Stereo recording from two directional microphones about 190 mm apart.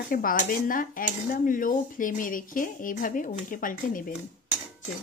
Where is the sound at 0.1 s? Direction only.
45° left (ahead or behind).